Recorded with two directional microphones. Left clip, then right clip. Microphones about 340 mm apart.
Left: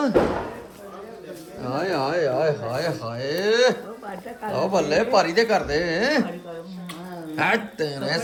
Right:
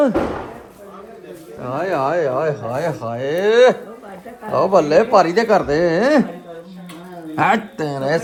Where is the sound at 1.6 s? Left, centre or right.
Centre.